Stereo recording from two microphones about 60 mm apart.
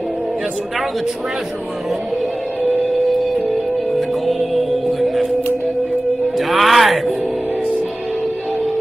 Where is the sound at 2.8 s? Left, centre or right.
Centre.